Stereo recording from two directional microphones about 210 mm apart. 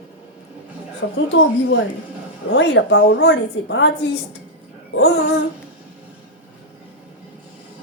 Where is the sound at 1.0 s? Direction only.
60° left (ahead or behind).